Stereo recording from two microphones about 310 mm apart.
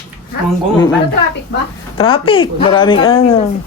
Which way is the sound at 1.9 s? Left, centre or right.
Centre.